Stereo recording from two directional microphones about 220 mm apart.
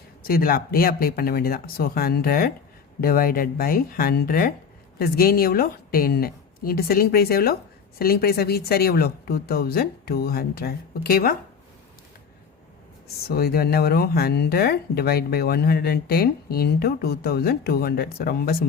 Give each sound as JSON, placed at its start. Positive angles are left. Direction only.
{"t": 0.2, "sound": "speech", "side_deg": 40}
{"t": 13.2, "sound": "speech", "side_deg": 45}